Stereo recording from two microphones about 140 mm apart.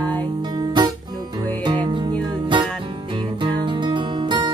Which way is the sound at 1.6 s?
35° right (ahead or behind).